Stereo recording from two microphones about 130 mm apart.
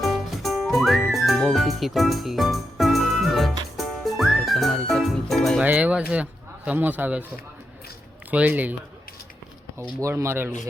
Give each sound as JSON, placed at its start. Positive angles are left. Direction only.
{"t": 0.0, "sound": "music", "side_deg": 0}
{"t": 5.6, "sound": "speech", "side_deg": -10}
{"t": 8.3, "sound": "speech", "side_deg": -10}
{"t": 10.0, "sound": "speech", "side_deg": -20}